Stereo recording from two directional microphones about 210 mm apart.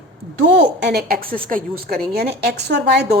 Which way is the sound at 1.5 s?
45° right (ahead or behind).